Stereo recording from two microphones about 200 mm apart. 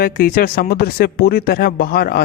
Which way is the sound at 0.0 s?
50° left (ahead or behind).